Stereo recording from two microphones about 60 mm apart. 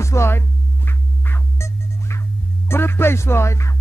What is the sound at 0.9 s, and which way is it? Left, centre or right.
Music, left.